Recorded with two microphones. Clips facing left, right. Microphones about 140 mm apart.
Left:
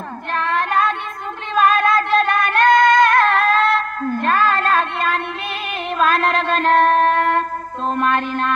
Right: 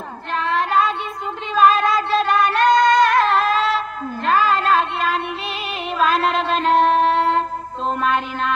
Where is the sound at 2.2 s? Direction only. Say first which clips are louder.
Even; 55° left (ahead or behind).